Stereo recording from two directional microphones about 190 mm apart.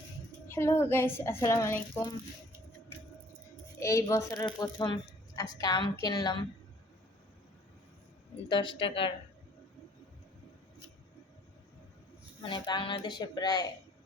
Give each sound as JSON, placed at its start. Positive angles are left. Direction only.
{"t": 0.4, "sound": "speech", "side_deg": 15}
{"t": 3.8, "sound": "speech", "side_deg": 15}
{"t": 8.4, "sound": "speech", "side_deg": 25}
{"t": 12.4, "sound": "speech", "side_deg": 25}